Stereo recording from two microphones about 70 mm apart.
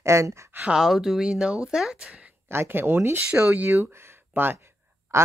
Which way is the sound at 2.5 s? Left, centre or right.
Right.